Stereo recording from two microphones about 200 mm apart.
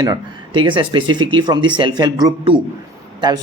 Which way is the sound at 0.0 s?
20° right (ahead or behind).